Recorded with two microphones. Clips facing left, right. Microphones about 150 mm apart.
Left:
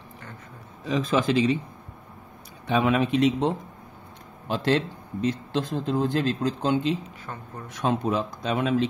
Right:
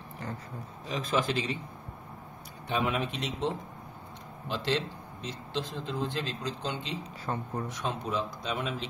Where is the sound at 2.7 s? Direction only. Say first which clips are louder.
Left 8 dB; 80° left.